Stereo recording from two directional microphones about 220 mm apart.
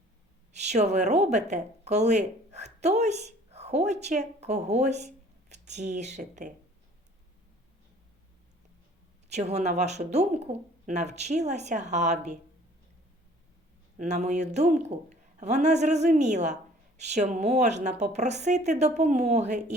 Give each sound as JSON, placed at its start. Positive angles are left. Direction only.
{"t": 0.5, "sound": "speech", "side_deg": -30}
{"t": 9.3, "sound": "a woman's voice", "side_deg": -30}
{"t": 14.0, "sound": "a woman's voice", "side_deg": -30}